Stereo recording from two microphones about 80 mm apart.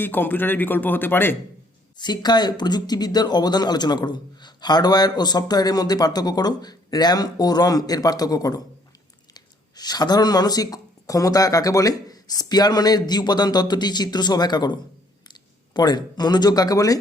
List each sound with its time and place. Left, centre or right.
0.0 s speech: left
2.0 s speech: left